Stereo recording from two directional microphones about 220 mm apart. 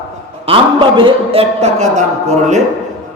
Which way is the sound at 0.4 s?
25° right (ahead or behind).